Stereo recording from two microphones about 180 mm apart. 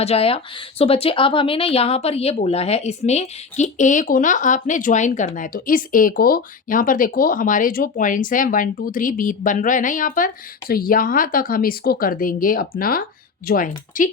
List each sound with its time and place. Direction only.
0.0 s speech: 35° left (ahead or behind); by 14.1 s 50° left (ahead or behind)